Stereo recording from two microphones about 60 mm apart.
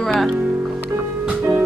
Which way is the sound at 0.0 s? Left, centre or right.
Centre.